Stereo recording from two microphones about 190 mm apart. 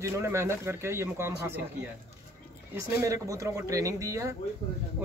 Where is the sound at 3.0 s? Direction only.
15° right (ahead or behind).